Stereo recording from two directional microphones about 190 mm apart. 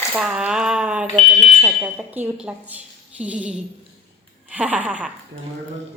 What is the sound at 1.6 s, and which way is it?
Speech, 10° right (ahead or behind).